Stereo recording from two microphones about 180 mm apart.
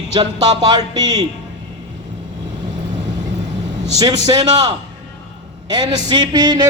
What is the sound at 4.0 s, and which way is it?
Music, 20° right (ahead or behind).